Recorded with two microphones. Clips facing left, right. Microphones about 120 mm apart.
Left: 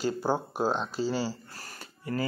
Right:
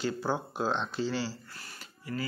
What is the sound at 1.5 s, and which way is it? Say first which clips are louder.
Music: left 3 dB; 40° left (ahead or behind).